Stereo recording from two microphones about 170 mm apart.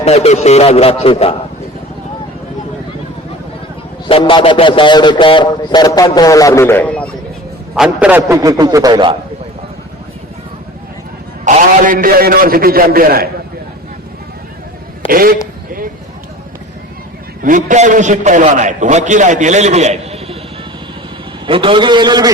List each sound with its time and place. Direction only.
0.0 s a man's voice: 40° left (ahead or behind)
4.0 s a man's voice: 30° left (ahead or behind); by 7.1 s 10° left (ahead or behind)
7.8 s a man's voice: 5° right (ahead or behind)
8.4 s a man's voice: 20° right (ahead or behind)
11.4 s a man's voice: 50° right (ahead or behind)
15.0 s a man's voice: 55° right (ahead or behind)
17.4 s a man's voice: 50° right (ahead or behind)
21.4 s a man's voice: 30° right (ahead or behind)